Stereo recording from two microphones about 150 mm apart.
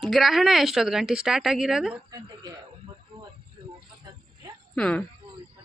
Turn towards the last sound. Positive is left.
turn(degrees=5)  # may be behind; listen again after turning